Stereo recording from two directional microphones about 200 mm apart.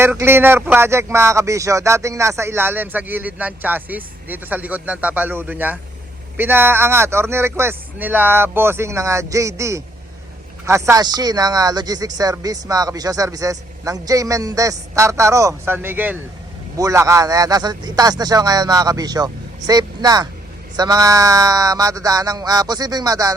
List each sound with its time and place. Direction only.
0.0 s a man's voice: 10° right (ahead or behind)